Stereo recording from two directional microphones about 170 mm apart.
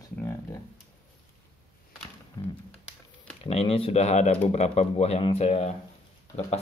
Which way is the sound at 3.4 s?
35° left (ahead or behind).